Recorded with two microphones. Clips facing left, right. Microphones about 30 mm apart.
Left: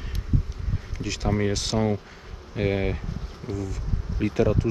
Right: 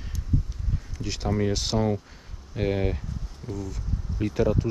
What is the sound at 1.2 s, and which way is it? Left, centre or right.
Speech, left.